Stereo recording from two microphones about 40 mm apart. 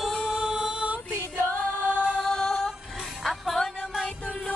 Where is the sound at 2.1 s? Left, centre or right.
Centre.